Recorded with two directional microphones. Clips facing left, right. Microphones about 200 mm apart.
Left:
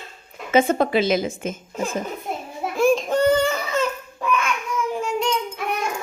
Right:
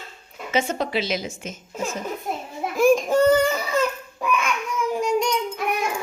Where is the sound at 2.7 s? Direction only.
5° right (ahead or behind).